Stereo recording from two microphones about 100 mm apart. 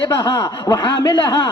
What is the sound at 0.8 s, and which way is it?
Speech, 45° left (ahead or behind).